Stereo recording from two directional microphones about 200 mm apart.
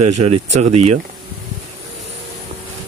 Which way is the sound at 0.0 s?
30° right (ahead or behind).